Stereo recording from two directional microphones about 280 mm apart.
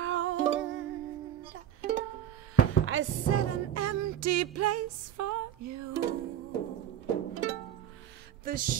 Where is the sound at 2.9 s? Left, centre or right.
Right.